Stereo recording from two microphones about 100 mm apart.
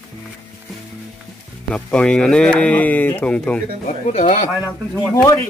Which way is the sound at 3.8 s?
90° left.